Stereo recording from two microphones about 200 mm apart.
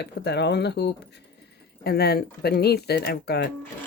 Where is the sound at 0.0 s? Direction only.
55° left (ahead or behind).